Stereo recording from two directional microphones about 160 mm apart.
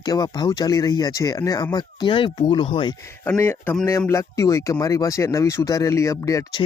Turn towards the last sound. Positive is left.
turn(degrees=20)  # may be behind; listen again after turning